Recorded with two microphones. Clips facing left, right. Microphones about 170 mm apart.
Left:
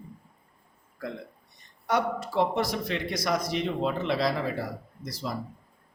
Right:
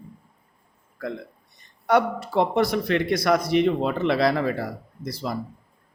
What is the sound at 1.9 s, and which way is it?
A man's voice, 60° right (ahead or behind).